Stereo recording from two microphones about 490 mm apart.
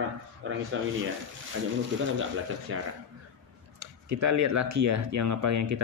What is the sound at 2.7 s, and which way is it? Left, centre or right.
Speech, right.